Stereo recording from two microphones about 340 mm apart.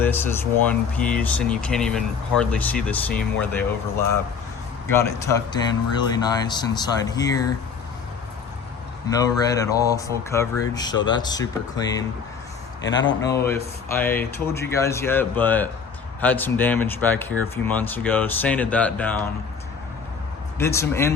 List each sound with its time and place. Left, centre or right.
0.0 s speech: centre
4.9 s speech: centre
9.0 s speech: centre
12.9 s speech: left
13.9 s speech: centre
20.6 s speech: centre